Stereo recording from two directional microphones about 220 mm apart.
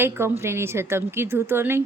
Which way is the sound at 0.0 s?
10° right (ahead or behind).